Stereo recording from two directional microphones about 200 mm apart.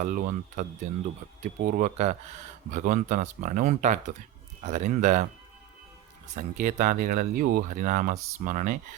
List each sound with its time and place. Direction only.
0.0 s speech: 40° right (ahead or behind)
6.3 s speech: 40° right (ahead or behind)